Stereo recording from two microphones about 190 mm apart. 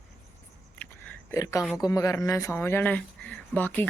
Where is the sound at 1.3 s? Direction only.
15° left (ahead or behind).